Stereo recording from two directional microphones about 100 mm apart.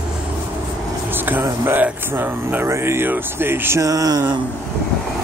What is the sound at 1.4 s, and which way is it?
Speech, 25° right (ahead or behind).